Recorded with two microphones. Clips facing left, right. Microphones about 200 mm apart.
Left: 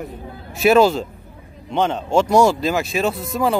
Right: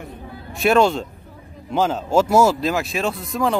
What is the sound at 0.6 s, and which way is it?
Speech, 5° left (ahead or behind).